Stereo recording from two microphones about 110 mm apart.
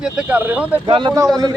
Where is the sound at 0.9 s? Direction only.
50° right (ahead or behind).